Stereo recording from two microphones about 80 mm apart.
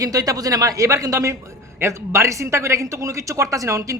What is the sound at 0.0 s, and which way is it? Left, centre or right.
Speech, right.